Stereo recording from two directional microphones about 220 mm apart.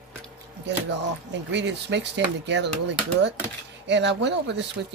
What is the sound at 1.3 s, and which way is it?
Speech, 50° right (ahead or behind).